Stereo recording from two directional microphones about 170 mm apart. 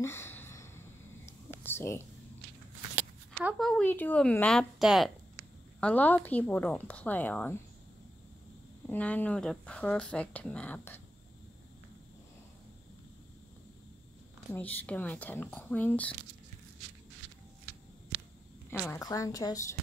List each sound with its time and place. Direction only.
0.0 s a sound: 15° left (ahead or behind)
3.4 s a woman's voice: centre (ahead or behind)
8.8 s a woman's voice: 10° left (ahead or behind)
14.5 s a woman's voice: 10° left (ahead or behind)
18.7 s a woman's voice: 15° left (ahead or behind)